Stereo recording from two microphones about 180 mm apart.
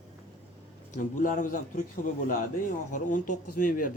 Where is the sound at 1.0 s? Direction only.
45° left (ahead or behind).